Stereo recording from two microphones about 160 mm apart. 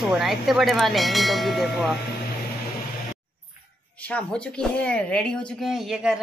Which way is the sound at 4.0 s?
10° left (ahead or behind).